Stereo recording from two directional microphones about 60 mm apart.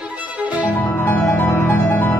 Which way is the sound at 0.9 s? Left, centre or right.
Left.